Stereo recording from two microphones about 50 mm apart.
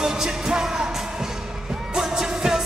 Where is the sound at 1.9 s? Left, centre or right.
Centre.